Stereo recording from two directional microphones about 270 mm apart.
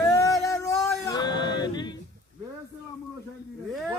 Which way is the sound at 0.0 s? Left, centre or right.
Centre.